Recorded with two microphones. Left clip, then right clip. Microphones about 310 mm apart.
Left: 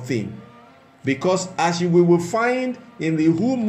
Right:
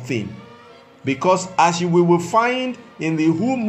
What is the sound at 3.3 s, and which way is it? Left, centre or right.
Speech, centre.